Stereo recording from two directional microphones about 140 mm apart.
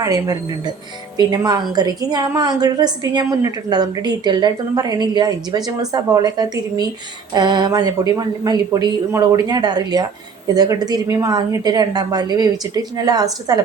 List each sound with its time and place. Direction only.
0.0 s a woman's voice: 25° right (ahead or behind)